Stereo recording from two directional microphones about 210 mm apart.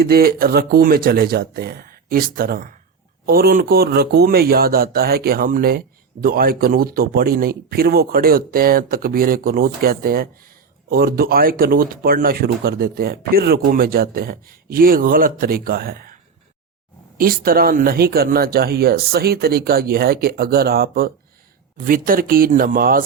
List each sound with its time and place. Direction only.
0.0 s speech: 45° right (ahead or behind)
17.2 s speech: 45° right (ahead or behind)